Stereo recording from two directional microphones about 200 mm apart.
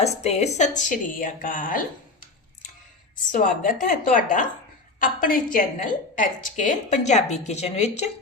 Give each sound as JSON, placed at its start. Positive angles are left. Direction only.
{"t": 0.0, "sound": "a woman's voice", "side_deg": 35}
{"t": 3.3, "sound": "a woman's voice", "side_deg": 40}